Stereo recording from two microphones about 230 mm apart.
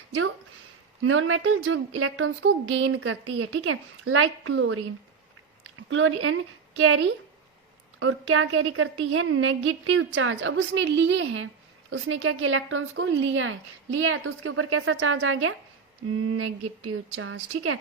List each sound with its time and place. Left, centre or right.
1.0 s speech: right